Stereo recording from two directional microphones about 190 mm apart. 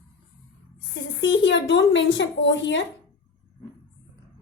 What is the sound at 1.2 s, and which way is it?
A woman's voice, 70° left (ahead or behind).